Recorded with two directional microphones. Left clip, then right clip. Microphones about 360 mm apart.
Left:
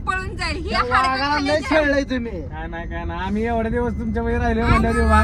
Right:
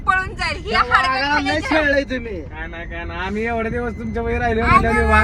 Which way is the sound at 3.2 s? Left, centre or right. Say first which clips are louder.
Right 1 dB; left.